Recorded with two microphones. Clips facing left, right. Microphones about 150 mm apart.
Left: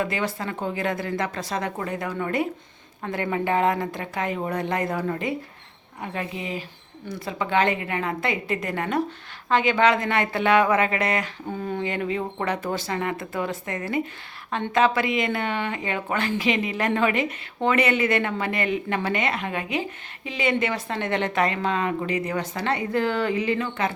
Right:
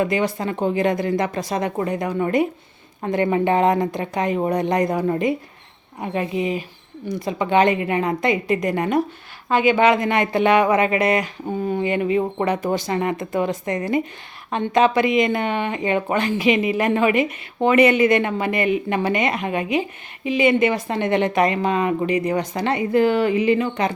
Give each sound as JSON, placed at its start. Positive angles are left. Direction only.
{"t": 0.0, "sound": "speech", "side_deg": -15}